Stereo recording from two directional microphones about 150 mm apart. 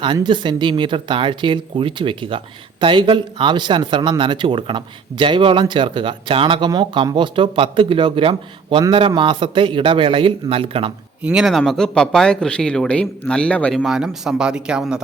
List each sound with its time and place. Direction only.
0.0 s speech: 30° right (ahead or behind)
11.2 s speech: 5° right (ahead or behind)